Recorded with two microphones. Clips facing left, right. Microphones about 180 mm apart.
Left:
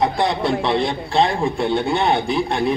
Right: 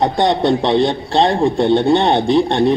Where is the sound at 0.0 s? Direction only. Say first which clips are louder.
Right 4 dB; 35° right (ahead or behind).